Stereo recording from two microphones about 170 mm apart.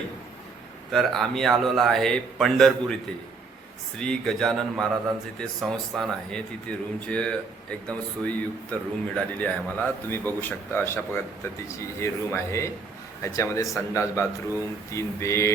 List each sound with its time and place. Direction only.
0.9 s speech: centre (ahead or behind); by 15.5 s 15° left (ahead or behind)